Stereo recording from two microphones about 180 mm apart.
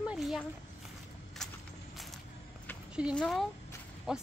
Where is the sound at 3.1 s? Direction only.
Centre (ahead or behind).